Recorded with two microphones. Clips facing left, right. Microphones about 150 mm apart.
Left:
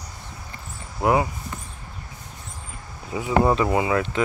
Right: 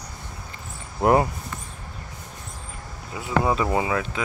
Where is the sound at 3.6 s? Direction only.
20° left (ahead or behind).